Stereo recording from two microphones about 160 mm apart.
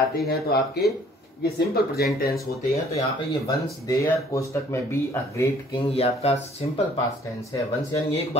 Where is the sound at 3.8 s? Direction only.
20° left (ahead or behind).